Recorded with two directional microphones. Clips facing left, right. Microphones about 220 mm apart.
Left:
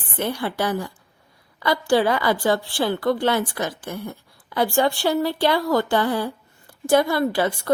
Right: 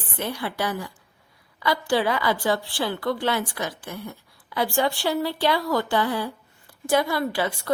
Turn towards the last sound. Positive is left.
turn(degrees=45)  # may be behind; listen again after turning